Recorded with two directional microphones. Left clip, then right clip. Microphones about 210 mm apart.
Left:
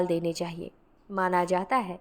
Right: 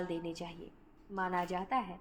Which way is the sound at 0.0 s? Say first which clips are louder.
Left 12 dB; 55° left (ahead or behind).